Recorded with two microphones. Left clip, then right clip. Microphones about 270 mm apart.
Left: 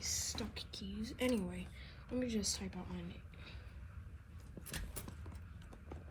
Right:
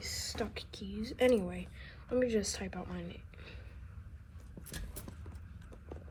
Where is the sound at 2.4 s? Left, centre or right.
Centre.